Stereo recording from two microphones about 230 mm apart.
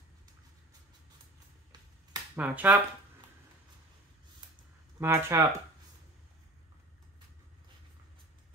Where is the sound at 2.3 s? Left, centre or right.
Centre.